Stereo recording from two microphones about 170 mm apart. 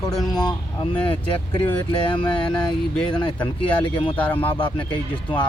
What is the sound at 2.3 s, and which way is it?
Speech, 5° left (ahead or behind).